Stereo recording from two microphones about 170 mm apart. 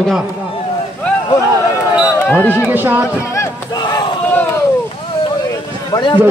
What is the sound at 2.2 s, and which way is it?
Speech, 10° left (ahead or behind).